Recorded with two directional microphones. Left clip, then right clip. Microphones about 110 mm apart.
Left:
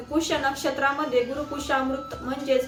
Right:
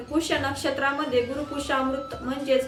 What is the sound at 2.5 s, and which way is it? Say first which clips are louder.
Speech: even; 10° right (ahead or behind).